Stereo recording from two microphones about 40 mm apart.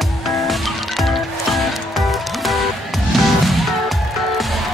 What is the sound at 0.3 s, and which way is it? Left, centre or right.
Music, centre.